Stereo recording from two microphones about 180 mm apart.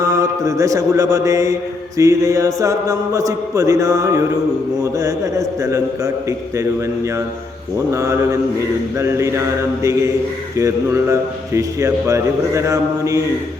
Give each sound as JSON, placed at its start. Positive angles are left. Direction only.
{"t": 0.0, "sound": "mantra", "side_deg": -20}
{"t": 2.0, "sound": "a man's voice", "side_deg": -15}
{"t": 7.9, "sound": "a man's voice", "side_deg": -15}